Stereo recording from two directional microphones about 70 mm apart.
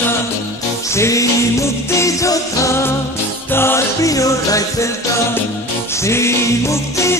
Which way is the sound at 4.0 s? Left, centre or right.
Left.